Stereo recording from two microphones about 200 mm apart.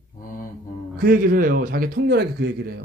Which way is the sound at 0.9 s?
45° right (ahead or behind).